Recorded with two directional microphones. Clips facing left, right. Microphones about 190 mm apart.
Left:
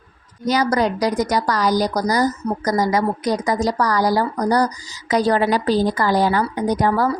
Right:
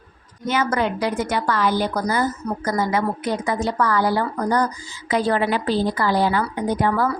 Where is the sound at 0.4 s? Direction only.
35° left (ahead or behind).